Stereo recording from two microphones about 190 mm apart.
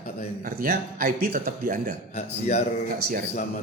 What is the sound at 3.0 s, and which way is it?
Speech, 55° right (ahead or behind).